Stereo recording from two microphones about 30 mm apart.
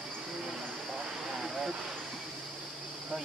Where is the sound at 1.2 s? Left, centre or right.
Centre.